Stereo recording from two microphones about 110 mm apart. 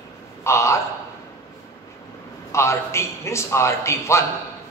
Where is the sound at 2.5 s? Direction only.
25° left (ahead or behind).